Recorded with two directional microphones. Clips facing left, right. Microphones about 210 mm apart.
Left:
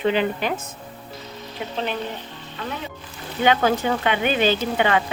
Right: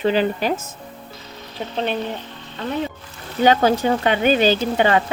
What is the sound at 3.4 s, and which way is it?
Speech, 40° right (ahead or behind).